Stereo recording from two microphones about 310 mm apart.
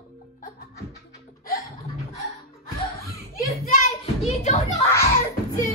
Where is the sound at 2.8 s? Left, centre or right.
Centre.